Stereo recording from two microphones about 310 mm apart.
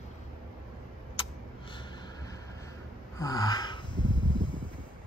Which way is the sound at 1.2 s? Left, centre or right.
Centre.